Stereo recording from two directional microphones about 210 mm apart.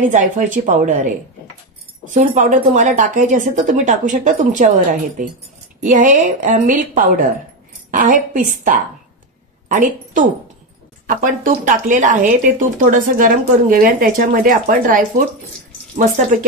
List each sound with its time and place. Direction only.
0.1 s speech: 35° right (ahead or behind)
2.1 s speech: 35° right (ahead or behind)